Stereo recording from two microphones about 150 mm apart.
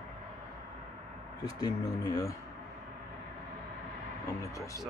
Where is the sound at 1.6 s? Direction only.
25° left (ahead or behind).